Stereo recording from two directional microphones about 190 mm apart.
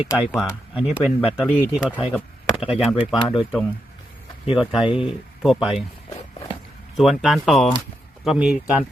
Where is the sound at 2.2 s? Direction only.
30° left (ahead or behind).